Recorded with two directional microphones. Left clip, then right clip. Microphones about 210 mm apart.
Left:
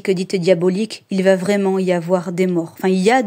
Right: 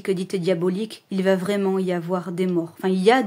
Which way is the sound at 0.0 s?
25° left (ahead or behind).